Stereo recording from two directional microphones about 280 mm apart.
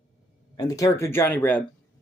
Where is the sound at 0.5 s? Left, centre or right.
Centre.